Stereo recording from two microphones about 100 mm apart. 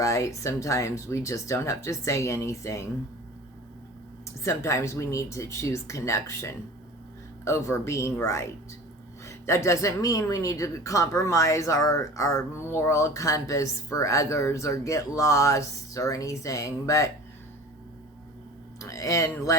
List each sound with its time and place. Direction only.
0.0 s a woman's voice: 30° left (ahead or behind)
4.4 s a woman's voice: 30° left (ahead or behind)
18.8 s speech: 35° left (ahead or behind)